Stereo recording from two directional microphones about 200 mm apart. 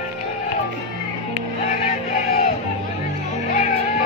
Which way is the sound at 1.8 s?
30° left (ahead or behind).